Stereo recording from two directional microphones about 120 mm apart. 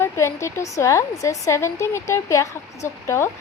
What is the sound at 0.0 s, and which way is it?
A woman's voice, 25° left (ahead or behind).